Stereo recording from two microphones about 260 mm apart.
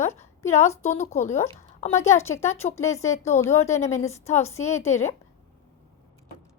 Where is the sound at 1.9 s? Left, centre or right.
Centre.